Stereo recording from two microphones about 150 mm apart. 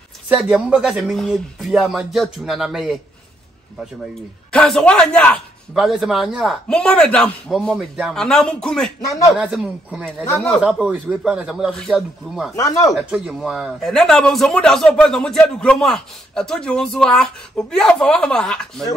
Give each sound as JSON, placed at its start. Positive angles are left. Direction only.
{"t": 0.3, "sound": "a man's voice", "side_deg": -10}
{"t": 4.5, "sound": "a man's voice", "side_deg": 5}
{"t": 5.8, "sound": "a man's voice", "side_deg": -5}
{"t": 9.0, "sound": "speech", "side_deg": 20}
{"t": 9.3, "sound": "speech", "side_deg": -5}
{"t": 10.2, "sound": "a man's voice", "side_deg": 15}
{"t": 10.6, "sound": "a man's voice", "side_deg": -5}
{"t": 12.5, "sound": "speech", "side_deg": 20}
{"t": 12.9, "sound": "a man's voice", "side_deg": 0}